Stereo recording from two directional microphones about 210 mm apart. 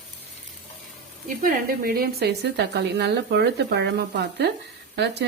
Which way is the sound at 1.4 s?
45° right (ahead or behind).